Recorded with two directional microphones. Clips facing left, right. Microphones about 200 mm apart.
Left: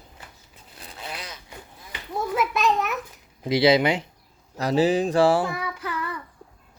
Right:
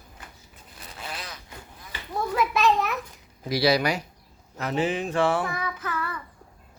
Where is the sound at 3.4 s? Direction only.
20° left (ahead or behind).